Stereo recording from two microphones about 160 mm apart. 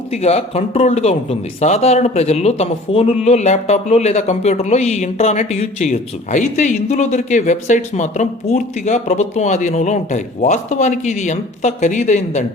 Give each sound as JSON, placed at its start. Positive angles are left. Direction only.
{"t": 0.1, "sound": "a man's voice", "side_deg": 40}